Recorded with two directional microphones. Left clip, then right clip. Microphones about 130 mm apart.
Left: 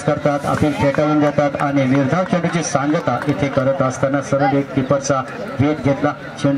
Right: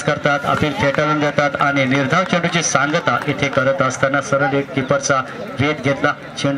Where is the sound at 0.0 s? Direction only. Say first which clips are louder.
Right 1 dB; 30° right (ahead or behind).